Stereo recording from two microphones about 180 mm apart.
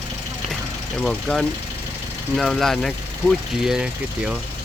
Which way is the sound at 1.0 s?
5° left (ahead or behind).